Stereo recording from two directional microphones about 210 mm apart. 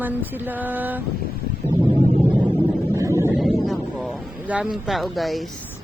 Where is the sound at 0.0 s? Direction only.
10° right (ahead or behind).